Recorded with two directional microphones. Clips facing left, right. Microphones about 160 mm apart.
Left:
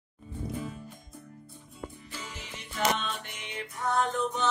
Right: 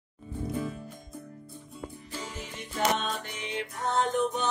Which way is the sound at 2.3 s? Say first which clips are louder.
Right 2 dB; 45° right (ahead or behind).